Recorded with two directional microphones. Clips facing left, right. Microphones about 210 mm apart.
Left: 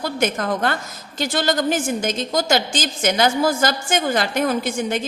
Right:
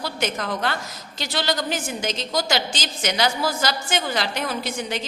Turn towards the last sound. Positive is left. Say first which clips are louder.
# left 6 dB
turn(degrees=50)  # may be behind; listen again after turning